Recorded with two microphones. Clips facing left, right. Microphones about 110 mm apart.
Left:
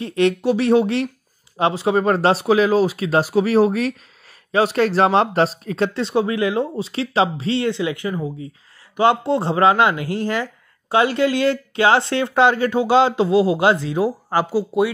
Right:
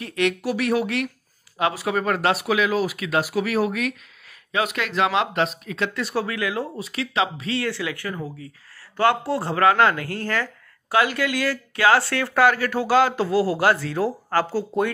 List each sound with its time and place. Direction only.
0.0 s speech: 30° left (ahead or behind); by 14.9 s 10° left (ahead or behind)